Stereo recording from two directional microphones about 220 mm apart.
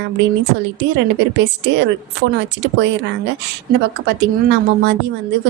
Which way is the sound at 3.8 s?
50° right (ahead or behind).